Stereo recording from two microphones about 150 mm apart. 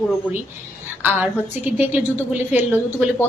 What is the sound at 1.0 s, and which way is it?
A woman's voice, 10° right (ahead or behind).